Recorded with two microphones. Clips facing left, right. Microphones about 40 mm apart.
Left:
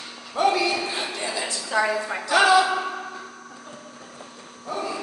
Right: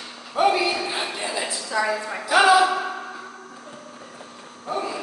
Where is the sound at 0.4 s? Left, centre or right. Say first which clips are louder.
Right 1 dB; centre.